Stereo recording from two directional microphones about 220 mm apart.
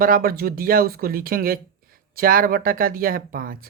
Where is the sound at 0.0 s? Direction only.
40° right (ahead or behind).